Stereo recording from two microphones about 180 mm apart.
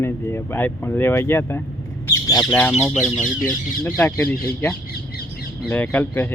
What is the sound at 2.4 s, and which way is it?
Speech, 5° left (ahead or behind).